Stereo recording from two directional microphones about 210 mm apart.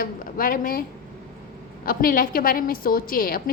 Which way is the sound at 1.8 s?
45° left (ahead or behind).